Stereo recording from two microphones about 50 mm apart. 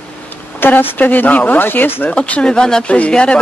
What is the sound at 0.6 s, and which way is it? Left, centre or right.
Speech, left.